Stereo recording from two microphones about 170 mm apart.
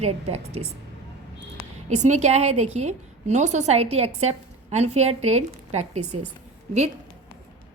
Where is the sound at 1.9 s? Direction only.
45° right (ahead or behind).